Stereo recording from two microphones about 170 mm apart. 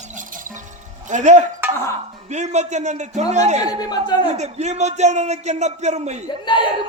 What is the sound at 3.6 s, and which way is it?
Speech, 25° left (ahead or behind).